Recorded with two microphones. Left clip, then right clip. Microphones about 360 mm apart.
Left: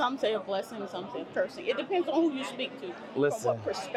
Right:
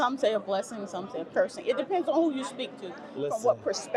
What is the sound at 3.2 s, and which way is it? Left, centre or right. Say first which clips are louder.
Speech: left 2 dB; left.